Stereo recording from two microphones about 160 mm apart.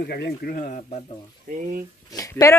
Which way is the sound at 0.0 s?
85° left.